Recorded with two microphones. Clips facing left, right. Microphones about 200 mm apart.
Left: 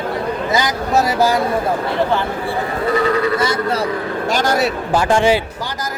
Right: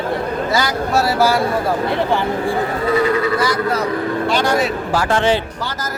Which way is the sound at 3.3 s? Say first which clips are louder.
Even; 25° left (ahead or behind).